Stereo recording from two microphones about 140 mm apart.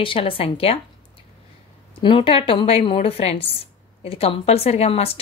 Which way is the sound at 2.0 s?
35° left (ahead or behind).